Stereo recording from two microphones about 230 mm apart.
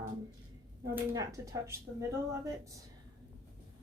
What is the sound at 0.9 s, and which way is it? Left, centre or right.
A woman's voice, centre.